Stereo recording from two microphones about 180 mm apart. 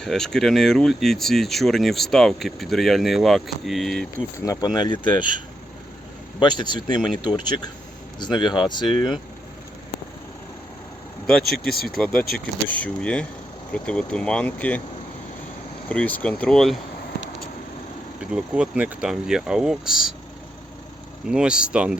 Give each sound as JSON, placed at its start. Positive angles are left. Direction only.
{"t": 0.0, "sound": "speech", "side_deg": 0}
{"t": 4.4, "sound": "speech", "side_deg": 25}
{"t": 6.4, "sound": "speech", "side_deg": 25}
{"t": 11.3, "sound": "speech", "side_deg": 5}
{"t": 15.9, "sound": "speech", "side_deg": 10}
{"t": 18.2, "sound": "speech", "side_deg": -5}
{"t": 21.2, "sound": "speech", "side_deg": -5}